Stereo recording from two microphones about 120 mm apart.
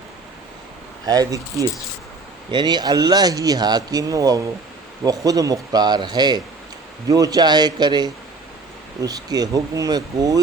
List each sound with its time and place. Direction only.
1.0 s speech: 30° right (ahead or behind)